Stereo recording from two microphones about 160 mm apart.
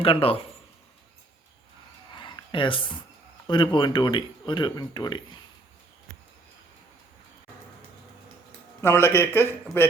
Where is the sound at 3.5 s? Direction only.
30° left (ahead or behind).